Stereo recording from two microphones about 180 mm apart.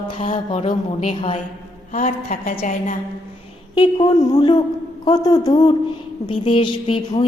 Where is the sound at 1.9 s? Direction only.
45° left (ahead or behind).